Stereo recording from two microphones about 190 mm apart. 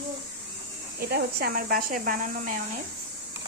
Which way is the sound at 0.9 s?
55° right (ahead or behind).